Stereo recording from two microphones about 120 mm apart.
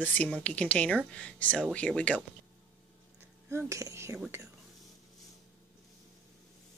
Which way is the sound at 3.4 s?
25° right (ahead or behind).